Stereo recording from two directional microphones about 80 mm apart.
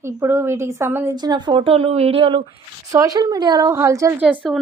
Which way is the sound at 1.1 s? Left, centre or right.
Right.